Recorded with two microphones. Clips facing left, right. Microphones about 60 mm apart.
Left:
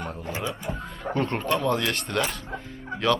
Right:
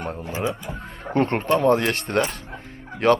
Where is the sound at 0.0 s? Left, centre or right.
Right.